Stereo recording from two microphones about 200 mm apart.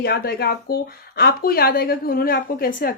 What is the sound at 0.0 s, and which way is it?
A woman's voice, 50° left (ahead or behind).